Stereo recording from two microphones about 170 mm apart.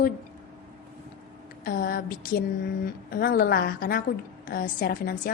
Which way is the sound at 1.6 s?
60° left (ahead or behind).